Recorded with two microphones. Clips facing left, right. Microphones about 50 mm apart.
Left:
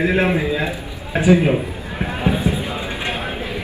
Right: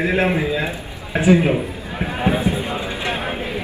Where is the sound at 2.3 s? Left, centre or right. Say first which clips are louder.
Right 1 dB; right.